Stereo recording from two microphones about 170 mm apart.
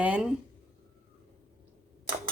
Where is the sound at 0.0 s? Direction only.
5° right (ahead or behind).